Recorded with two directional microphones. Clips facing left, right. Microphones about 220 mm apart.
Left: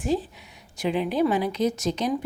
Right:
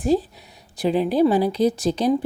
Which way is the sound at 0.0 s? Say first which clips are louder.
Right 6 dB; 35° right (ahead or behind).